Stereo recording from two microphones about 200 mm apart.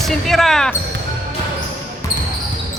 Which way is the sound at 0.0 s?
Centre (ahead or behind).